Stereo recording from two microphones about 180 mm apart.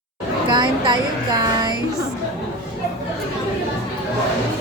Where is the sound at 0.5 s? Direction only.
25° right (ahead or behind).